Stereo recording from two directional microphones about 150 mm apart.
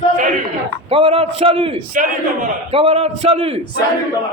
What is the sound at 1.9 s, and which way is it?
Speech, 60° right (ahead or behind).